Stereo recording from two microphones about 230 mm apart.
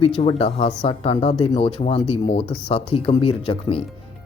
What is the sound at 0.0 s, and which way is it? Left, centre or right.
Speech, left.